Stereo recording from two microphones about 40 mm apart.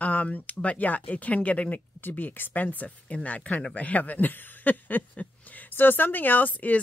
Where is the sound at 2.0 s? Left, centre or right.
Left.